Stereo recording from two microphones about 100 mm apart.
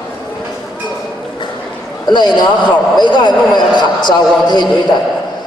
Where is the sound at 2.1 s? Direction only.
45° left (ahead or behind).